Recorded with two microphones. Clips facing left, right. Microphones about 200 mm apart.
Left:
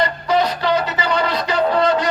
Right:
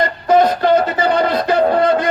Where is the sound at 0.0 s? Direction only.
50° right (ahead or behind).